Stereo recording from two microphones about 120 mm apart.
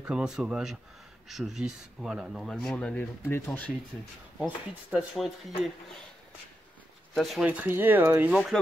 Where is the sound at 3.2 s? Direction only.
20° left (ahead or behind).